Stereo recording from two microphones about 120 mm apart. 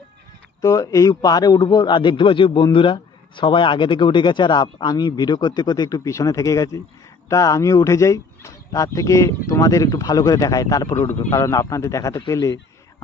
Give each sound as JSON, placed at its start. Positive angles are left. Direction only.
{"t": 0.6, "sound": "speech", "side_deg": 30}